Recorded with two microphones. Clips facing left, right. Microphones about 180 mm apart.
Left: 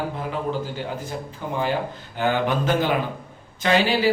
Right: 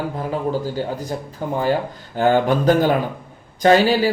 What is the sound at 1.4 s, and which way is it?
A man's voice, 45° right (ahead or behind).